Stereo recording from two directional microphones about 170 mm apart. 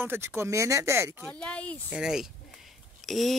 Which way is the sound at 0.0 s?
10° right (ahead or behind).